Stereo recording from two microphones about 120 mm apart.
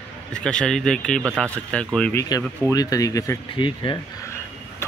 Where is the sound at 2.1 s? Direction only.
30° left (ahead or behind).